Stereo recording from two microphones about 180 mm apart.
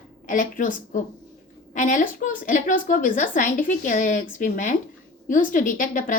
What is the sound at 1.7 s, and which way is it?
Speech, 45° left (ahead or behind).